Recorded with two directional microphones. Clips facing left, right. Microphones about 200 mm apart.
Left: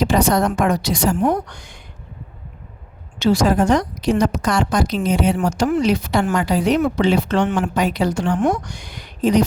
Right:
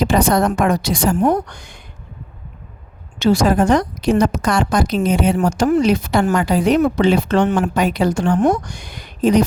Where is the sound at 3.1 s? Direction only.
50° right (ahead or behind).